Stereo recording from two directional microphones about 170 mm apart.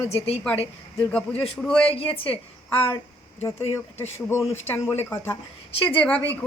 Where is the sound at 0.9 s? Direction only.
10° left (ahead or behind).